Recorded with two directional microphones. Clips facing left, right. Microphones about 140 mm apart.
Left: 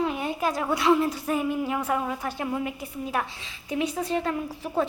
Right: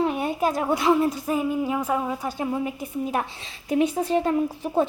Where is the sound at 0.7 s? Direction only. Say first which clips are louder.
Even; 25° right (ahead or behind).